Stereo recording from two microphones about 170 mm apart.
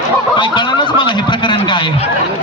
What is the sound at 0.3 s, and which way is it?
Speech, 25° left (ahead or behind).